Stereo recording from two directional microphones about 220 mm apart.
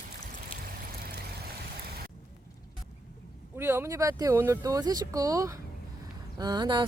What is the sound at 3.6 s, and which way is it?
Speech, 10° right (ahead or behind).